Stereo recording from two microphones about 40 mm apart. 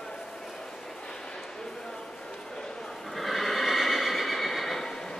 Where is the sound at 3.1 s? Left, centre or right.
Centre.